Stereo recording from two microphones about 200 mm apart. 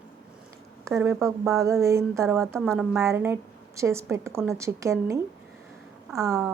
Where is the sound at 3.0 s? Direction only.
15° right (ahead or behind).